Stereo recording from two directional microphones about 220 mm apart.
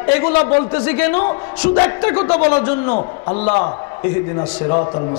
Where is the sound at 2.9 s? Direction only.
35° left (ahead or behind).